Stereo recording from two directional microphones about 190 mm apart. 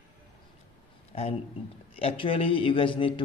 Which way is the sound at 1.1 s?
30° left (ahead or behind).